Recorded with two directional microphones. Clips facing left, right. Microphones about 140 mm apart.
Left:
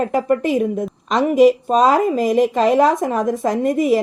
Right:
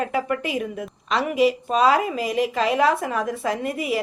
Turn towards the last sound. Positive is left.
turn(degrees=40)  # may be behind; listen again after turning